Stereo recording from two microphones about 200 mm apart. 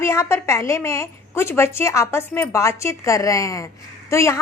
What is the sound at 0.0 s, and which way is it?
A woman's voice, 15° left (ahead or behind).